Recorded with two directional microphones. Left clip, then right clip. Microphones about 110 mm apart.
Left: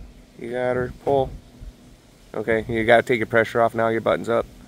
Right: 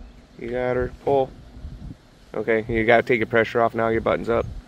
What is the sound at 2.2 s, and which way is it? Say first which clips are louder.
Speech: right 1 dB; 35° left (ahead or behind).